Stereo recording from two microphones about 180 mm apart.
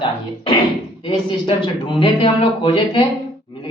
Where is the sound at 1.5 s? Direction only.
25° left (ahead or behind).